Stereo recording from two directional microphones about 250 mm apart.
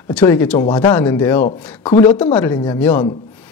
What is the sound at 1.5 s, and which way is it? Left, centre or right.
Speech, left.